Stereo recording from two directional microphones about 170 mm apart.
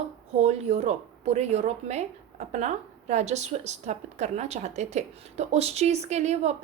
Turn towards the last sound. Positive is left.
turn(degrees=-40)  # may be behind; listen again after turning